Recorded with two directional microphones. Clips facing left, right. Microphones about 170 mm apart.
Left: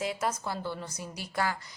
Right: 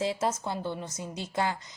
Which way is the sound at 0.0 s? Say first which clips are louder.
Right 3 dB; 25° right (ahead or behind).